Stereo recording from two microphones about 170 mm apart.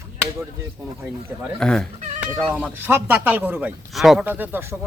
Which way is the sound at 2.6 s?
10° right (ahead or behind).